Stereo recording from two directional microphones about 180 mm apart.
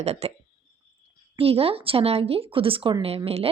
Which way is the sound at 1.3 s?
30° right (ahead or behind).